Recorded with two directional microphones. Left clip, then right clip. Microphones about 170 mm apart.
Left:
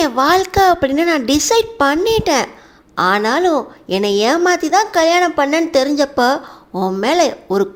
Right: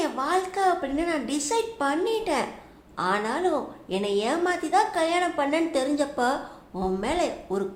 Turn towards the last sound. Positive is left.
turn(degrees=40)  # may be behind; listen again after turning